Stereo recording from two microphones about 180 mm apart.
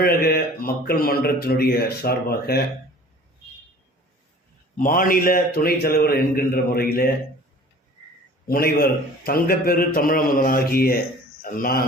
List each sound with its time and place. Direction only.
0.0 s a man's voice: 60° left (ahead or behind)
4.8 s a man's voice: 50° left (ahead or behind)
8.4 s a man's voice: 55° left (ahead or behind)